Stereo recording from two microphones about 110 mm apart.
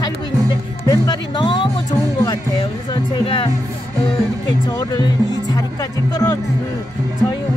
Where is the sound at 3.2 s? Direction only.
55° left (ahead or behind).